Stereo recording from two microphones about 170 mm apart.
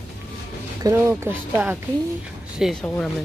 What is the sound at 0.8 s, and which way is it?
Speech, 15° right (ahead or behind).